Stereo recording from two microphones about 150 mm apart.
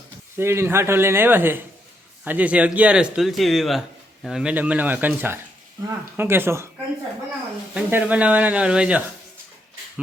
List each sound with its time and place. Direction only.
0.3 s speech: 15° right (ahead or behind)
7.7 s speech: 10° right (ahead or behind)